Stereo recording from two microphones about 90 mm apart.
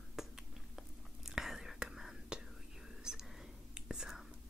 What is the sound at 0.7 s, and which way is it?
Whispering, 5° right (ahead or behind).